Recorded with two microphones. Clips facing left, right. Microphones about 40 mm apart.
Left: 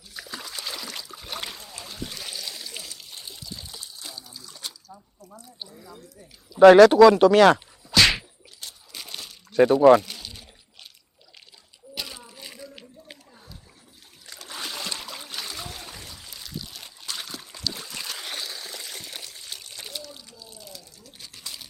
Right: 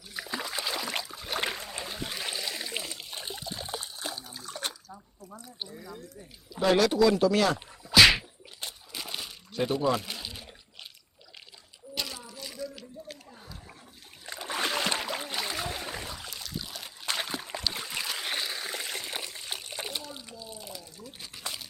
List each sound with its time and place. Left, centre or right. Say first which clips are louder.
0.1 s splash: right 3 dB; centre
1.4 s splash: right 4 dB; right
4.9 s drip: left 1 dB; centre
5.6 s speech: right 4 dB; centre
6.6 s speech: left 12 dB; left
7.9 s whip: right 1 dB; centre
8.9 s water: right 1 dB; centre
9.5 s speech: left 12 dB; left
10.0 s pour: even; centre
11.9 s a sound: even; centre
14.3 s a sound: right 5 dB; right
16.3 s a sound: even; centre
17.1 s a sound: right 4 dB; right
17.6 s boat: left 3 dB; right